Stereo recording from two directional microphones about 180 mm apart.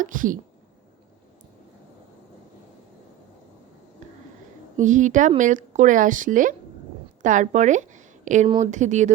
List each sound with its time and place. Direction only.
0.0 s speech: 45° right (ahead or behind)
4.8 s a woman's voice: 45° right (ahead or behind)